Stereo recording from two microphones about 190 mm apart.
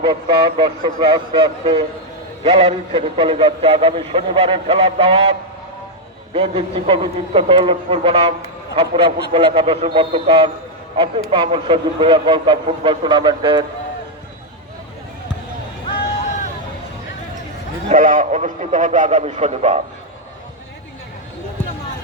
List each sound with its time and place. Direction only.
0.0 s a man's voice: 25° right (ahead or behind)
6.3 s a man's voice: 30° right (ahead or behind)
17.8 s a man's voice: 45° right (ahead or behind)